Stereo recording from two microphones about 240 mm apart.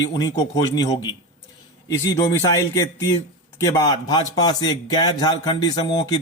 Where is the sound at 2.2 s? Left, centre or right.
Centre.